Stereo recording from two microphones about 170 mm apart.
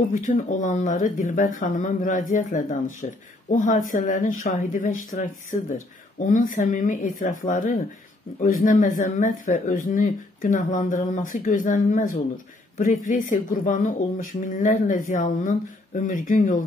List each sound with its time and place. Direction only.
0.1 s speech: 50° left (ahead or behind)